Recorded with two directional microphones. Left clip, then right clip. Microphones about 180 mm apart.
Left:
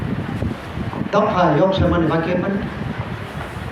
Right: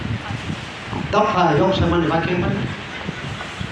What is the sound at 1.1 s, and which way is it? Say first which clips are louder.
Speech: even; 20° right (ahead or behind).